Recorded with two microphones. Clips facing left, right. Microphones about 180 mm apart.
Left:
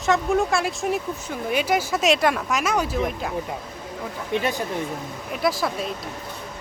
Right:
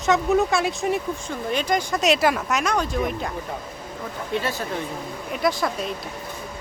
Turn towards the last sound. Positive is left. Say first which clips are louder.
# even
turn(degrees=0)  # may be behind; listen again after turning